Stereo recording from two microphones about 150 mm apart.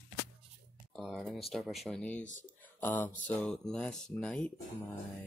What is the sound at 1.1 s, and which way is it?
Speech, centre (ahead or behind).